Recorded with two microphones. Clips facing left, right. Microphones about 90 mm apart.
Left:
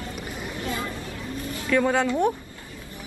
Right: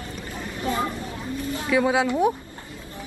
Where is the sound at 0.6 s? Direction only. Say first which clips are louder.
Right 6 dB; 25° right (ahead or behind).